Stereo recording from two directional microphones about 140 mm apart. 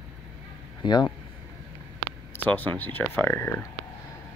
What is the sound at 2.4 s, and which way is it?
Speech, 10° left (ahead or behind).